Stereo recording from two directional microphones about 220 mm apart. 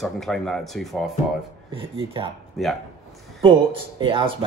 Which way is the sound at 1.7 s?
25° right (ahead or behind).